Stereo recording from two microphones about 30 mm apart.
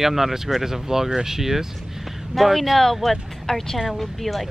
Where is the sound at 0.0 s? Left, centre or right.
Centre.